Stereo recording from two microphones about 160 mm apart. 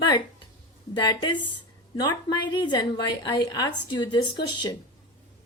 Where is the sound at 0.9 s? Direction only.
25° left (ahead or behind).